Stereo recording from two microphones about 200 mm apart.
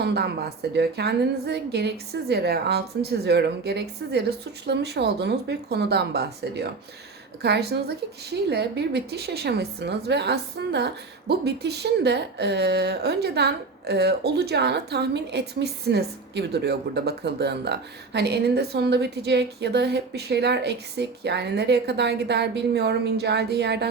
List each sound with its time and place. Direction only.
0.0 s a woman's voice: 55° right (ahead or behind)